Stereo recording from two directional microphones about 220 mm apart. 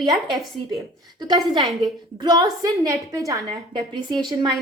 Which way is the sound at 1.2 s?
20° right (ahead or behind).